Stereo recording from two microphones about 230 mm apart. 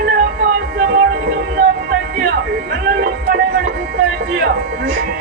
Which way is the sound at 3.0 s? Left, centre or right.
Right.